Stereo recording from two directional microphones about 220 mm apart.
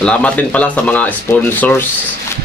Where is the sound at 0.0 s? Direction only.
5° left (ahead or behind).